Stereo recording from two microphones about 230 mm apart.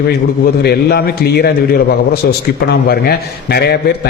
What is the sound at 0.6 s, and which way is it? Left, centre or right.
A man's voice, left.